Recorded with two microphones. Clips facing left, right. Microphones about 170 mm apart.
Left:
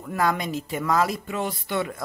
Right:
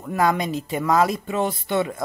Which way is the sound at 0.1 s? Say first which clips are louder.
Right 3 dB; 20° right (ahead or behind).